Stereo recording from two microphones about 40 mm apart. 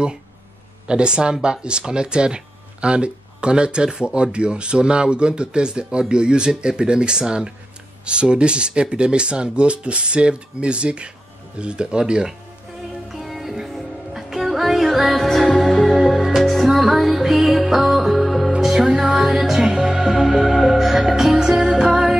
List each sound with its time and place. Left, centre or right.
0.8 s speech: right
13.1 s music: centre